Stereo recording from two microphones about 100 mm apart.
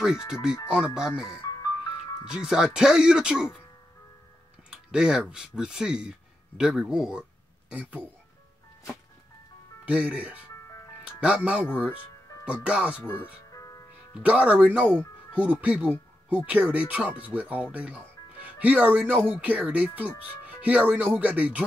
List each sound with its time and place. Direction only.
0.0 s speech: 5° right (ahead or behind)
1.4 s music: 40° left (ahead or behind)
2.2 s speech: 5° right (ahead or behind)
4.6 s speech: 5° right (ahead or behind)
9.8 s speech: 10° right (ahead or behind)
13.0 s speech: 20° left (ahead or behind)
13.5 s music: 35° left (ahead or behind)
14.2 s speech: 15° right (ahead or behind)